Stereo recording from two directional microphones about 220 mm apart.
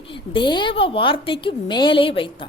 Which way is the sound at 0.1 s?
20° left (ahead or behind).